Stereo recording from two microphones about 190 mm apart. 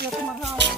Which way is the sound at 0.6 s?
65° right (ahead or behind).